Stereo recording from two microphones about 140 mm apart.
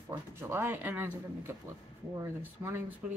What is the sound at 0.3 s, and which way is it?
Speech, 15° right (ahead or behind).